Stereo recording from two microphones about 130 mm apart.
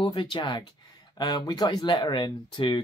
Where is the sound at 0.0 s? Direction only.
35° left (ahead or behind).